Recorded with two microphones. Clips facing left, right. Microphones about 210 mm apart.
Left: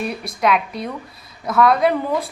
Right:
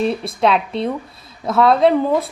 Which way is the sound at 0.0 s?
25° right (ahead or behind).